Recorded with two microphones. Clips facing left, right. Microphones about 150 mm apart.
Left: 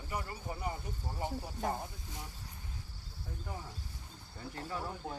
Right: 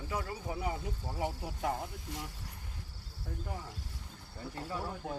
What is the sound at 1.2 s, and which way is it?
Speech, 80° right.